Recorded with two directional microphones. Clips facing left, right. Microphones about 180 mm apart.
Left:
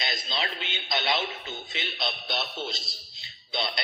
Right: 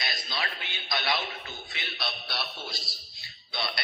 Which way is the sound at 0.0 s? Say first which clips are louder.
Left 3 dB; 25° left (ahead or behind).